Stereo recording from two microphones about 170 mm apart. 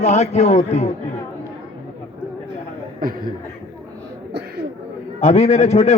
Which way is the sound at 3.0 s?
55° right (ahead or behind).